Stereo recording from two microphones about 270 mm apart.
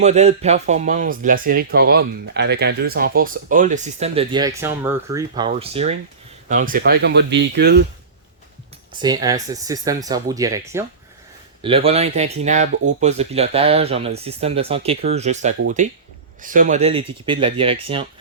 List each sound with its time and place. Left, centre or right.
0.0 s speech: right
9.0 s speech: centre
11.6 s speech: right